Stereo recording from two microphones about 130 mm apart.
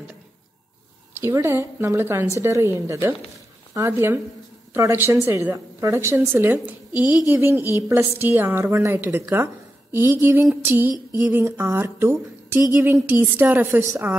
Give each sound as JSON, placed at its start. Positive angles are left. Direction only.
{"t": 1.2, "sound": "a woman's voice", "side_deg": -20}